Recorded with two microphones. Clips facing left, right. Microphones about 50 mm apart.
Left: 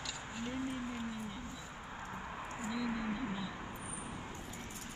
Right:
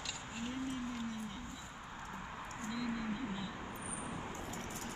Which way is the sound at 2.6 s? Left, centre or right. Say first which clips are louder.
Left 2 dB; centre.